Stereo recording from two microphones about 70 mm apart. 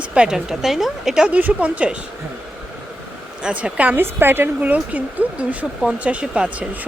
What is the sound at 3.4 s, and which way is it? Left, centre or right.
Speech, centre.